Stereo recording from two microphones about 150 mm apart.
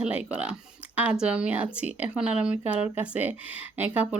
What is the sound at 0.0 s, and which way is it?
Speech, 5° right (ahead or behind).